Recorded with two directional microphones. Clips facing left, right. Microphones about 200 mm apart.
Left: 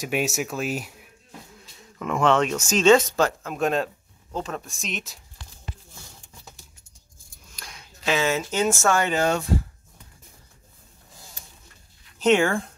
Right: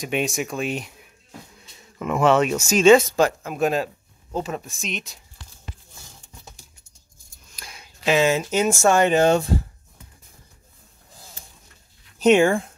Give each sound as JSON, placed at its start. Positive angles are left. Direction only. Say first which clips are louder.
{"t": 0.0, "sound": "speech", "louder": "right 1 dB", "side_deg": 5}
{"t": 7.5, "sound": "speech", "louder": "right 1 dB", "side_deg": -5}
{"t": 12.3, "sound": "speech", "louder": "right 4 dB", "side_deg": -15}